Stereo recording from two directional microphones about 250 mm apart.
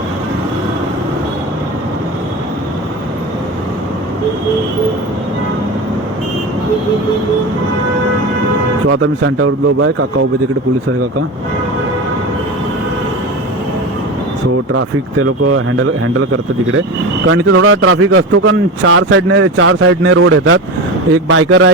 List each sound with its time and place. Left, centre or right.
8.9 s a man's voice: right
14.7 s a man's voice: right